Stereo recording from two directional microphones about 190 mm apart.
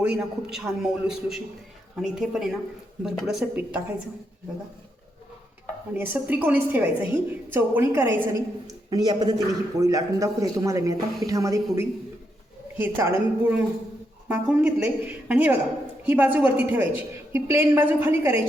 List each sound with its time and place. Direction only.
0.0 s a man's voice: 5° right (ahead or behind)
5.9 s a woman's voice: 10° right (ahead or behind)